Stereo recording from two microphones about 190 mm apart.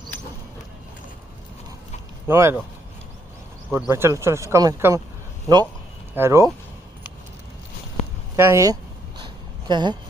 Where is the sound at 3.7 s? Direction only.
10° right (ahead or behind).